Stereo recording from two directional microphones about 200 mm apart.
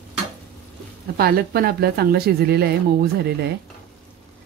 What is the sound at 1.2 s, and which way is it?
Speech, 50° right (ahead or behind).